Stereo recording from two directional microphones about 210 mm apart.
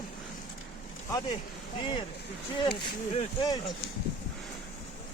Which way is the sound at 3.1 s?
20° left (ahead or behind).